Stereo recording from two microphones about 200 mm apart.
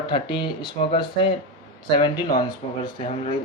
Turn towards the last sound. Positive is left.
turn(degrees=25)  # may be behind; listen again after turning